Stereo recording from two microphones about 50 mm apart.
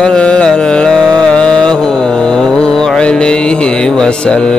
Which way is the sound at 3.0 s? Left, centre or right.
Centre.